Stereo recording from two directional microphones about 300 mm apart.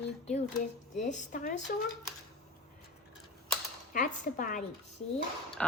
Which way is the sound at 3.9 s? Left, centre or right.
Left.